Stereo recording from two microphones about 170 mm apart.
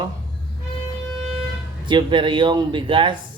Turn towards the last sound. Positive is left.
turn(degrees=-30)  # may be behind; listen again after turning